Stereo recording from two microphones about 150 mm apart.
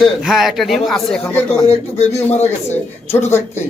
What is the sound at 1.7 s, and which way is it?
Speech, 45° left (ahead or behind).